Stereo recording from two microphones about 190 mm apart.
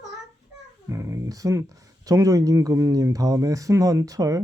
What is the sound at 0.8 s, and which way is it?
Speech, 15° right (ahead or behind).